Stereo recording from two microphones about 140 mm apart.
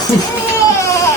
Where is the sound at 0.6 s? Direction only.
20° left (ahead or behind).